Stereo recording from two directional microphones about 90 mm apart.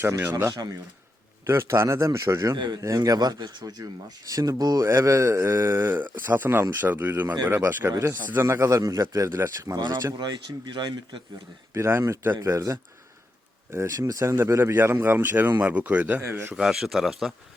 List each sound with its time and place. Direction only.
0.0 s a man's voice: 30° right (ahead or behind)
2.6 s speech: 55° right (ahead or behind)
2.8 s speech: 40° right (ahead or behind)
4.8 s a man's voice: 35° right (ahead or behind)
9.7 s speech: 50° right (ahead or behind)
11.7 s a man's voice: 30° right (ahead or behind)
16.6 s speech: 5° right (ahead or behind)